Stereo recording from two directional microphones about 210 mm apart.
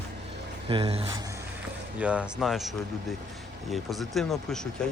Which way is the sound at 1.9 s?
5° right (ahead or behind).